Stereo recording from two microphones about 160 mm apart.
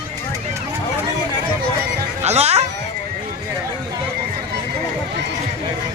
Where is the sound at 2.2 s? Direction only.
40° right (ahead or behind).